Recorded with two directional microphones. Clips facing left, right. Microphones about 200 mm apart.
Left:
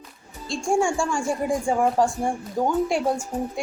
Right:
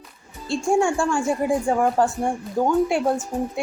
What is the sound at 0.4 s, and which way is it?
A woman's voice, 5° right (ahead or behind).